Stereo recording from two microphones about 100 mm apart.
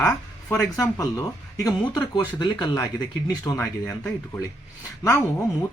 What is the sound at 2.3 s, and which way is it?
Speech, 45° left (ahead or behind).